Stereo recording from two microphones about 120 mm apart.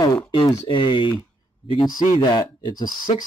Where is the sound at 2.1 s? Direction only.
35° left (ahead or behind).